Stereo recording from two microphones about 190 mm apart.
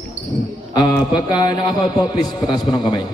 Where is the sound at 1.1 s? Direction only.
20° left (ahead or behind).